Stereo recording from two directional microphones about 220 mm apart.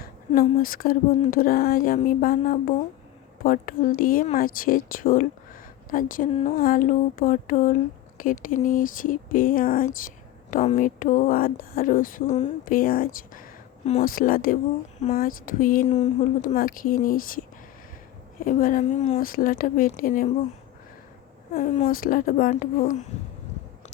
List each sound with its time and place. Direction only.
0.0 s speech: 40° left (ahead or behind)
18.4 s speech: 35° left (ahead or behind)
21.5 s speech: 40° left (ahead or behind)